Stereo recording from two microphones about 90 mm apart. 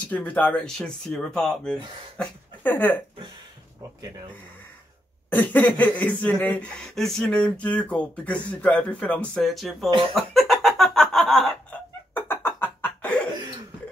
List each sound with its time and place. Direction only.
0.1 s speech: 15° left (ahead or behind)
2.1 s speech: 20° left (ahead or behind)
5.3 s speech: 20° left (ahead or behind)
6.7 s speech: 5° left (ahead or behind)
10.1 s cough: centre (ahead or behind)
12.1 s a sound: 25° left (ahead or behind)
13.0 s cough: 15° left (ahead or behind)